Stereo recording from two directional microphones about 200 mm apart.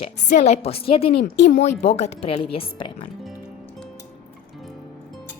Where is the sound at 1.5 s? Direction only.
35° left (ahead or behind).